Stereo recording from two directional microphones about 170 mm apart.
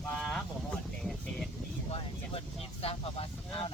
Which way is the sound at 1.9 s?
35° left (ahead or behind).